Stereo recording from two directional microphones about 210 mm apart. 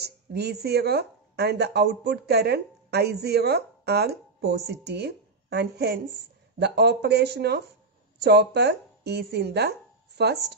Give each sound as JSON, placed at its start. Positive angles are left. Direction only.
{"t": 0.0, "sound": "speech", "side_deg": -50}